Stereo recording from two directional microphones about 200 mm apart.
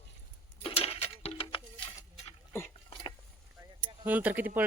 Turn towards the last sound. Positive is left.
turn(degrees=-10)  # may be behind; listen again after turning